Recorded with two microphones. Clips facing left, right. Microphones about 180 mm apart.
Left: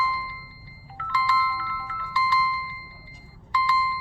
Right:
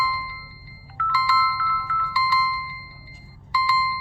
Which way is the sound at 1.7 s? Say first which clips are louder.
Right 5 dB; 25° left (ahead or behind).